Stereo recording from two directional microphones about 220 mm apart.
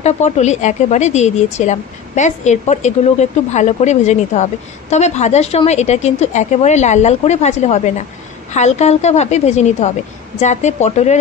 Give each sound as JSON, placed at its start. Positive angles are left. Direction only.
{"t": 0.0, "sound": "a woman's voice", "side_deg": 30}